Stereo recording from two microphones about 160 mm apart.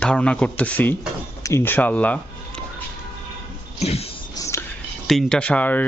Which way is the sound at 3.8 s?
40° left (ahead or behind).